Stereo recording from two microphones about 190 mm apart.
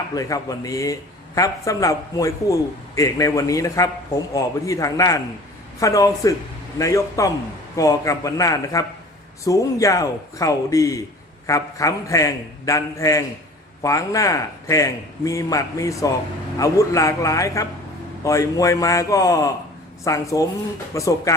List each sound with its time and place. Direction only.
0.1 s a man's voice: 20° left (ahead or behind)